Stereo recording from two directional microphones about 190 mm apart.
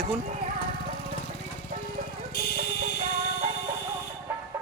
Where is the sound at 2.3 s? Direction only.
55° left (ahead or behind).